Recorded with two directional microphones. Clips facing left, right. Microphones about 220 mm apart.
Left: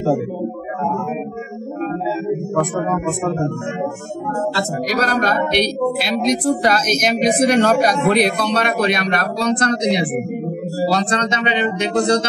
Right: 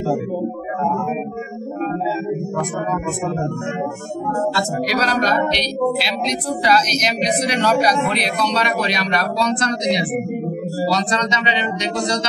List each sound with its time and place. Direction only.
4.8 s a woman's voice: 50° left (ahead or behind)
10.9 s speech: 55° left (ahead or behind)